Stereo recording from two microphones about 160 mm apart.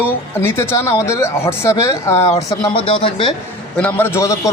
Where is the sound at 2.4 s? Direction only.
30° left (ahead or behind).